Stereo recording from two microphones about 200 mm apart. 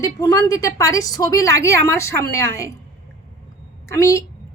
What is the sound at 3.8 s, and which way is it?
Speech, 15° left (ahead or behind).